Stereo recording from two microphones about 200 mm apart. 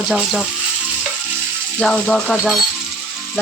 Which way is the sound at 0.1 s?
5° right (ahead or behind).